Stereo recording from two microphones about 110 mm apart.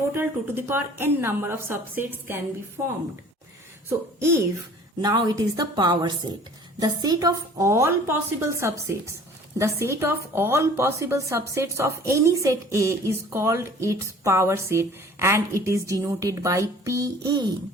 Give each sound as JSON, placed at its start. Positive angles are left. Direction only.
{"t": 0.1, "sound": "a woman's voice", "side_deg": -20}
{"t": 5.0, "sound": "a woman's voice", "side_deg": -35}